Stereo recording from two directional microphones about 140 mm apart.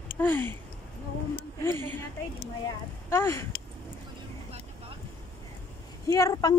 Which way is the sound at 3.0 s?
20° left (ahead or behind).